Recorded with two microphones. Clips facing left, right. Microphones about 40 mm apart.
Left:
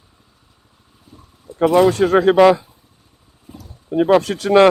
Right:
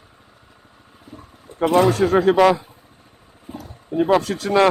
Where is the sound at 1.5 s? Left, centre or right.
Right.